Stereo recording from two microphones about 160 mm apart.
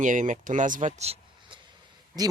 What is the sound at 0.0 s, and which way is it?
Speech, 50° right (ahead or behind).